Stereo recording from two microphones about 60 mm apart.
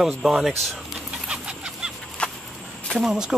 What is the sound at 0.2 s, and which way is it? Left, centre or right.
Speech, centre.